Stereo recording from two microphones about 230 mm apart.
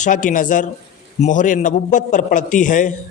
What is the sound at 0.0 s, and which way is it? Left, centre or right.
A man's voice, left.